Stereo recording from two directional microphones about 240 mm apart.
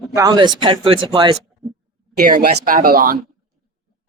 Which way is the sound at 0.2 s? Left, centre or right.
Centre.